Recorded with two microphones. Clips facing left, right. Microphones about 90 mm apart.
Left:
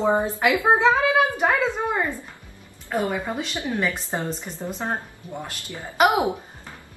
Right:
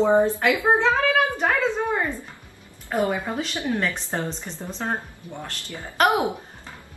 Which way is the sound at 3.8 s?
5° left (ahead or behind).